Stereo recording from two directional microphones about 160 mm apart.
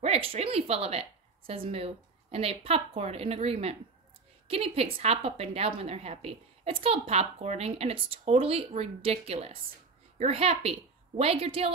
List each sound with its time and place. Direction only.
0.0 s a woman's voice: 40° right (ahead or behind)